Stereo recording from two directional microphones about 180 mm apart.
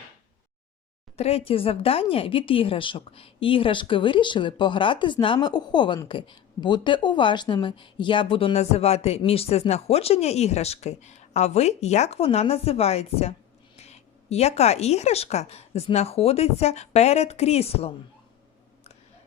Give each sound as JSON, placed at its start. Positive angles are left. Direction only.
{"t": 1.1, "sound": "speech", "side_deg": 35}